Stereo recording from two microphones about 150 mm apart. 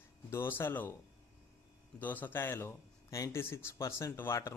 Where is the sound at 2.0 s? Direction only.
10° left (ahead or behind).